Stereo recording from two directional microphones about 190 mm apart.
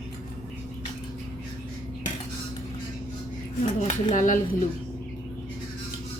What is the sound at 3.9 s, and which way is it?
Speech, 40° left (ahead or behind).